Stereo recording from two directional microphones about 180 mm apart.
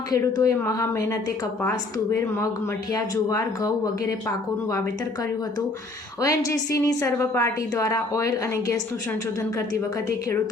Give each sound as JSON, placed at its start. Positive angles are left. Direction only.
{"t": 0.1, "sound": "a woman's voice", "side_deg": 20}
{"t": 2.9, "sound": "speech", "side_deg": 20}
{"t": 6.2, "sound": "a woman's voice", "side_deg": 20}